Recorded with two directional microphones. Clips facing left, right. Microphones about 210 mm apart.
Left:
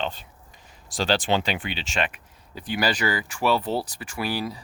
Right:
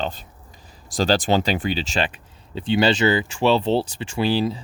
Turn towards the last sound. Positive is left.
turn(degrees=-25)  # may be behind; listen again after turning